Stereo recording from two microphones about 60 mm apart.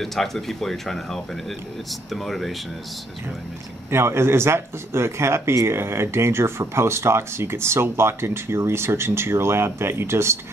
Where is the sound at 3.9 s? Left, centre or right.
Right.